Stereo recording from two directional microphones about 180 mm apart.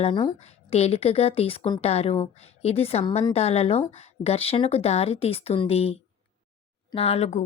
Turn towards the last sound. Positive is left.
turn(degrees=40)  # may be behind; listen again after turning